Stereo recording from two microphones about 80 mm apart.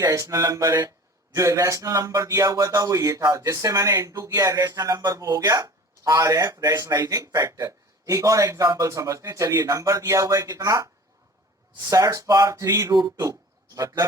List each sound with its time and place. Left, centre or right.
0.0 s speech: right
8.9 s speech: right
11.9 s speech: right
12.9 s speech: right